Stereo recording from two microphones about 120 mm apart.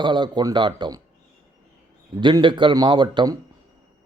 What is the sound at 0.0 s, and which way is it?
Speech, 40° right (ahead or behind).